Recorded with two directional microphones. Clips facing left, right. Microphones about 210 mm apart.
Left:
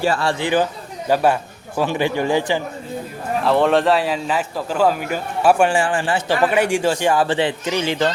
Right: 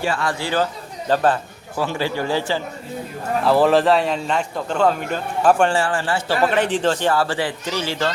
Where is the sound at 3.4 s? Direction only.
Centre (ahead or behind).